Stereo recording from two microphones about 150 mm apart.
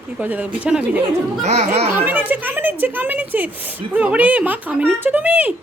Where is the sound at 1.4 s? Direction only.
50° right (ahead or behind).